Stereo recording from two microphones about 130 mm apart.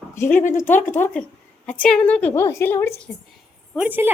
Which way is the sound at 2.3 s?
20° left (ahead or behind).